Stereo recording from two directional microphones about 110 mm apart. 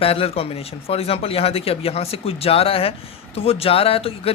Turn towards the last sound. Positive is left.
turn(degrees=60)  # may be behind; listen again after turning